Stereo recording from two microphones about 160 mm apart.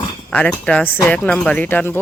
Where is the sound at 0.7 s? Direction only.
10° left (ahead or behind).